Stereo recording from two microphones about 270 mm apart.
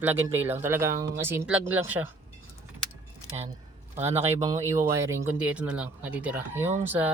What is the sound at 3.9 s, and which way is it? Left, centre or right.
Speech, right.